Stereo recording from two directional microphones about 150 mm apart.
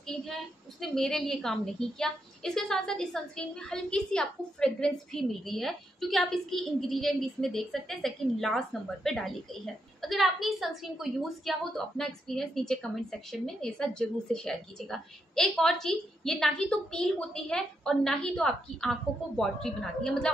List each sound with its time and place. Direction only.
0.0 s a woman's voice: 5° left (ahead or behind)